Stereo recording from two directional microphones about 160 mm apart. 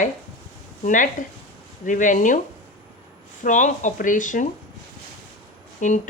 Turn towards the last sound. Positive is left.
turn(degrees=50)  # may be behind; listen again after turning